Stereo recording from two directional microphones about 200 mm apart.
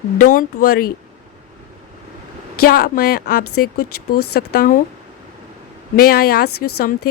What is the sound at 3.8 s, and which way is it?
Speech, 90° left.